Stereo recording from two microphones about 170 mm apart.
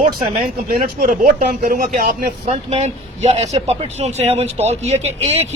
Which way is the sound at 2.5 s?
40° right (ahead or behind).